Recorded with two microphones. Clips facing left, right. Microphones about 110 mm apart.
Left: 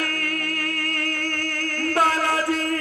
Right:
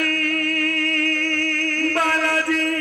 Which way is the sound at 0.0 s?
25° left (ahead or behind).